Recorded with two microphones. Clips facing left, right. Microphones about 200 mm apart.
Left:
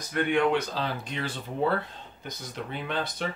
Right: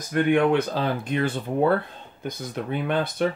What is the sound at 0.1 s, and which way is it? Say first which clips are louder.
Speech: right 5 dB; 50° right (ahead or behind).